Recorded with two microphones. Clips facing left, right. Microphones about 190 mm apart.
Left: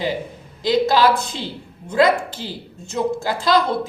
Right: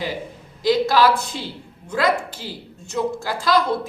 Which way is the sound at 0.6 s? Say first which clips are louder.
Left 1 dB; 20° left (ahead or behind).